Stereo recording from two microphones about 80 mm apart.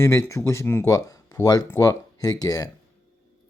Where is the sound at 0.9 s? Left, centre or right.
Left.